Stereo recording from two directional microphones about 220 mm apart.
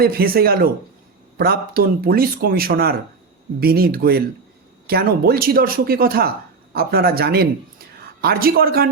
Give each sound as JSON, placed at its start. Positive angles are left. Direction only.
{"t": 0.0, "sound": "speech", "side_deg": -45}